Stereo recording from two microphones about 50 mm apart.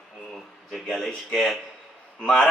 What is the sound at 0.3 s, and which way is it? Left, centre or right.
Speech, centre.